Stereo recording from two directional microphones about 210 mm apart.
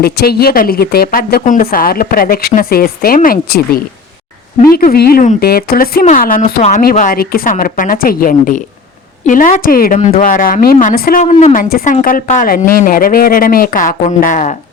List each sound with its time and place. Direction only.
0.0 s a woman's voice: 50° left (ahead or behind)